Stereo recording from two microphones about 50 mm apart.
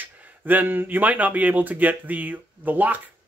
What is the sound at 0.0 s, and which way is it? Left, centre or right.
Speech, right.